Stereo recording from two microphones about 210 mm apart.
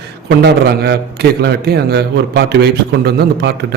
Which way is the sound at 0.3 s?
50° right (ahead or behind).